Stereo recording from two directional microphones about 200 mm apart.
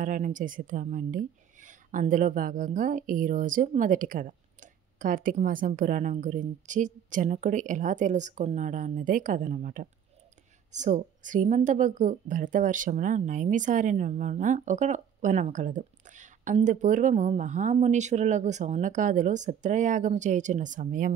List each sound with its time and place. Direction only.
0.0 s a woman's voice: 40° right (ahead or behind)